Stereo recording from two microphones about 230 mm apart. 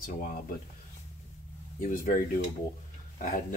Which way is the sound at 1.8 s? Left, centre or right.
Left.